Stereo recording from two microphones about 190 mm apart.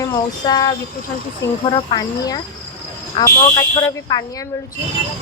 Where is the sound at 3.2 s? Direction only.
15° left (ahead or behind).